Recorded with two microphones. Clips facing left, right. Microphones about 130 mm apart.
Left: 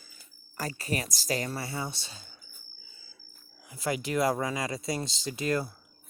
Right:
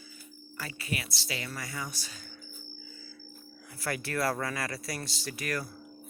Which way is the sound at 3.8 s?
20° left (ahead or behind).